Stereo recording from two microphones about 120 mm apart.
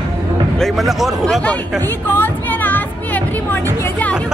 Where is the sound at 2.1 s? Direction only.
15° left (ahead or behind).